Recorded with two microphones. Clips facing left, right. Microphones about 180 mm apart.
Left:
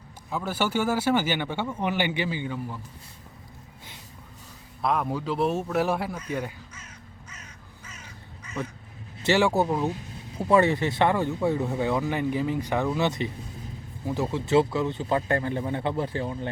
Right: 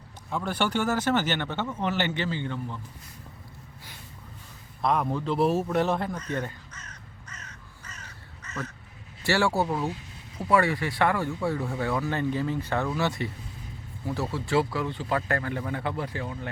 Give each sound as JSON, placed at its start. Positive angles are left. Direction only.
{"t": 0.3, "sound": "speech", "side_deg": 5}
{"t": 4.8, "sound": "a man's voice", "side_deg": 0}
{"t": 7.9, "sound": "crow", "side_deg": 10}
{"t": 9.2, "sound": "speech", "side_deg": 20}